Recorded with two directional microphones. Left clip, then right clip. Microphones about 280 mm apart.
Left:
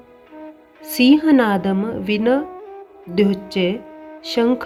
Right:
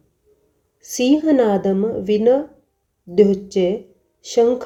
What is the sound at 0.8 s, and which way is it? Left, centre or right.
Speech, left.